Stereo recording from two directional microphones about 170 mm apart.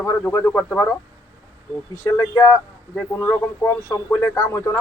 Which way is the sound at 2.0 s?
20° left (ahead or behind).